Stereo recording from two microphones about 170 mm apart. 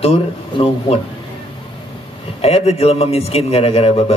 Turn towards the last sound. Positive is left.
turn(degrees=35)  # may be behind; listen again after turning